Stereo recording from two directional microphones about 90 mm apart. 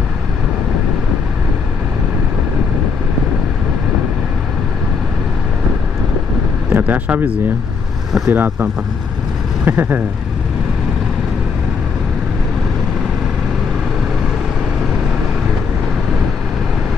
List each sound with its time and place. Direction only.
6.7 s vehicle: 20° right (ahead or behind)
8.3 s speech: 20° right (ahead or behind)
9.7 s speech: 20° right (ahead or behind)